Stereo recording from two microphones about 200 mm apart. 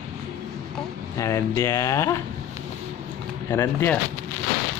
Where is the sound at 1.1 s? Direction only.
15° left (ahead or behind).